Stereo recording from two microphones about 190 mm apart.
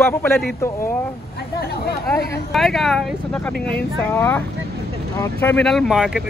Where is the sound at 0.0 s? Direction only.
15° left (ahead or behind).